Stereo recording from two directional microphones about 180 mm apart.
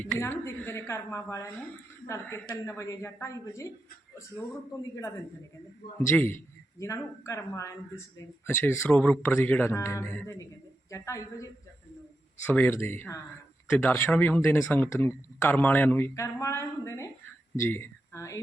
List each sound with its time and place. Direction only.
0.0 s speech: 10° left (ahead or behind)
6.1 s speech: 15° left (ahead or behind)
12.5 s speech: 10° left (ahead or behind)